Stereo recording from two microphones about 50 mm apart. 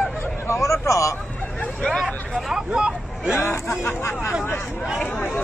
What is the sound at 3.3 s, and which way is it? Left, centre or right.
Speech, left.